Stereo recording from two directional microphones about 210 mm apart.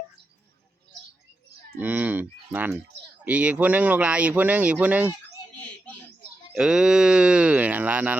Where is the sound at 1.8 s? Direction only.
5° right (ahead or behind).